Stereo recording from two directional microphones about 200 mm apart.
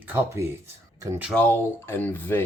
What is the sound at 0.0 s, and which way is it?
Speech, 10° right (ahead or behind).